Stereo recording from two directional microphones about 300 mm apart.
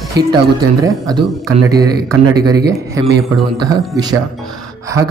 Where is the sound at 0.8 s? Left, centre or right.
Centre.